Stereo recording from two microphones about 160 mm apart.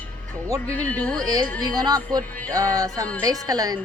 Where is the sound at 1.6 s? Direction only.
25° right (ahead or behind).